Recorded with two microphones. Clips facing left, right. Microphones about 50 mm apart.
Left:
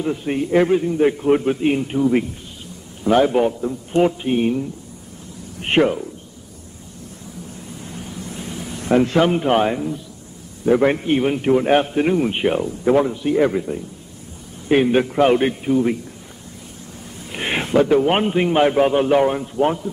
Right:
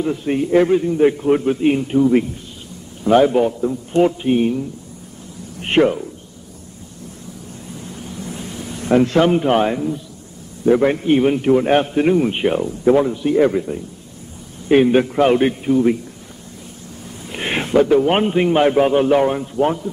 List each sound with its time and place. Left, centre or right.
0.0 s a man's voice: centre
1.2 s a man's voice: centre
4.4 s a man's voice: centre
5.6 s speech: centre
7.8 s vehicle: centre
8.4 s a sound: centre
9.0 s a man's voice: centre
17.3 s a sound: centre
17.8 s a man's voice: centre